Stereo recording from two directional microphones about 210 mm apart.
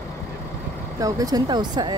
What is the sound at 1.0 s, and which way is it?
Speech, 20° right (ahead or behind).